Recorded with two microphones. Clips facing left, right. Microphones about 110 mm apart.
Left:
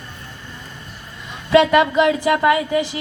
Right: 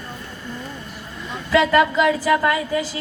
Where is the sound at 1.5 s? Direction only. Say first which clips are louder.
Left 3 dB; 20° left (ahead or behind).